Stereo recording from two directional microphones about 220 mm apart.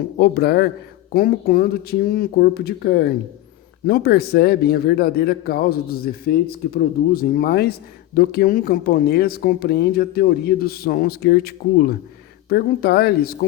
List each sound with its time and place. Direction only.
0.2 s a man's voice: 45° left (ahead or behind)